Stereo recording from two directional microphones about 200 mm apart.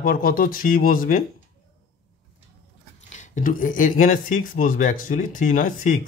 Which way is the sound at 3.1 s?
40° left (ahead or behind).